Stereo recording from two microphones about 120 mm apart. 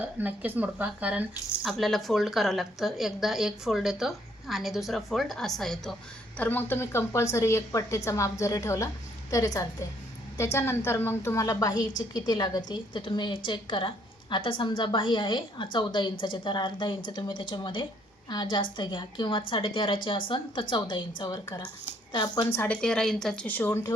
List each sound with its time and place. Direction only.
0.0 s speech: 15° right (ahead or behind)
1.6 s a woman's voice: 5° left (ahead or behind); by 22.4 s 35° left (ahead or behind)
22.4 s a woman's voice: 20° left (ahead or behind)
22.7 s a woman's voice: 5° left (ahead or behind)